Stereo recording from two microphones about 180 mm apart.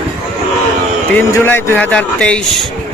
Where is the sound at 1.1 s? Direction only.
10° left (ahead or behind).